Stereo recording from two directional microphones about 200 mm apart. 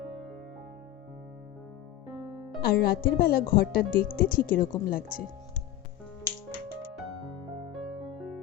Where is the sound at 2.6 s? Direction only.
50° left (ahead or behind).